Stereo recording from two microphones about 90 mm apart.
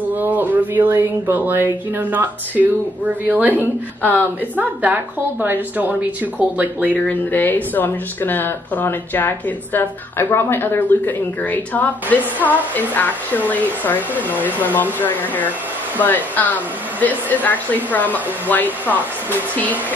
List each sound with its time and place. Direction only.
0.1 s a woman's voice: 20° right (ahead or behind)
4.0 s speech: 20° left (ahead or behind)
4.6 s a woman's voice: 20° right (ahead or behind)
7.1 s speech: 20° left (ahead or behind)